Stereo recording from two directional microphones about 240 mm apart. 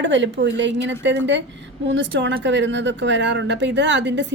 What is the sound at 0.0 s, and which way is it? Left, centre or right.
A woman's voice, right.